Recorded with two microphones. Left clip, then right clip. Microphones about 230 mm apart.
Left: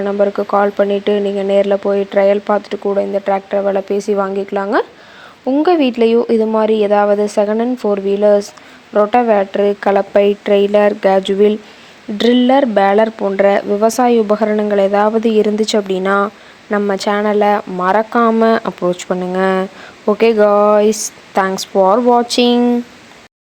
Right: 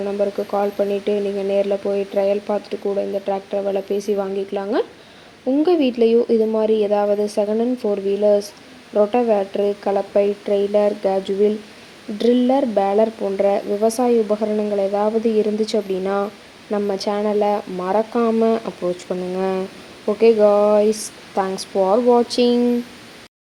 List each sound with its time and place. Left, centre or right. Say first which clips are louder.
0.0 s speech: left 7 dB; left
14.3 s speech: left 6 dB; left